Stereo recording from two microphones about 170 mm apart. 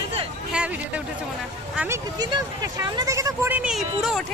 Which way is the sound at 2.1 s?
20° right (ahead or behind).